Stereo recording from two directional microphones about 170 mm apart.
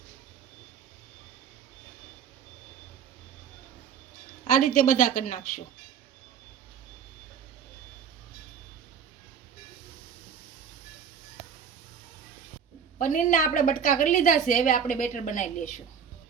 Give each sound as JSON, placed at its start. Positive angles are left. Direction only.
{"t": 4.6, "sound": "a woman's voice", "side_deg": 50}
{"t": 13.0, "sound": "a woman's voice", "side_deg": 50}